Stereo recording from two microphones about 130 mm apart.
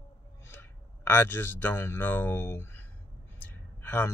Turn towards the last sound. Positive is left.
turn(degrees=15)  # may be behind; listen again after turning